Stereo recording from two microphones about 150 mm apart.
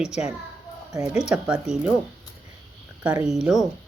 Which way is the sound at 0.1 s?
5° right (ahead or behind).